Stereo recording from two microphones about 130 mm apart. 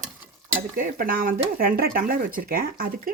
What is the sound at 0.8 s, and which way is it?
Speech, 90° right.